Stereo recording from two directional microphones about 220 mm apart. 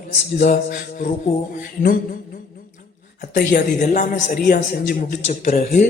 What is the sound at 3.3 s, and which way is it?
A man's voice, 35° left (ahead or behind).